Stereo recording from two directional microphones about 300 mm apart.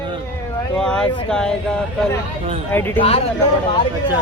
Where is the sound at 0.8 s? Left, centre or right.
Centre.